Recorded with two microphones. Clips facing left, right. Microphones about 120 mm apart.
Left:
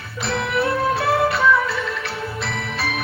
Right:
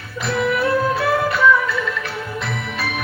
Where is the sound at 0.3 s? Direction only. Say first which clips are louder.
Right 3 dB; 30° left (ahead or behind).